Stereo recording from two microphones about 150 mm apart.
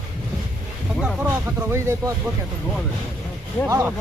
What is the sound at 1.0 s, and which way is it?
Speech, 5° right (ahead or behind).